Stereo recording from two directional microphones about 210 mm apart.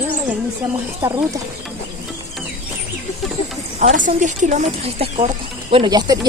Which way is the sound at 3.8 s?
35° right (ahead or behind).